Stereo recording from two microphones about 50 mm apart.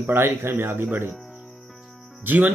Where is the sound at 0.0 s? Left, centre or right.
Right.